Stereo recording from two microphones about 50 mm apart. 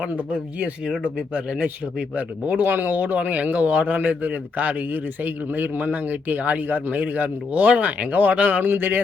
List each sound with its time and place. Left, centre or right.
1.0 s speech: right
3.2 s speech: right